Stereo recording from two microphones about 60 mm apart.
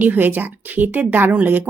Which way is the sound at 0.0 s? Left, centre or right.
Right.